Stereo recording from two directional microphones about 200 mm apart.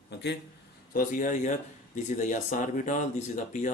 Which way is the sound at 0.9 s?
45° left (ahead or behind).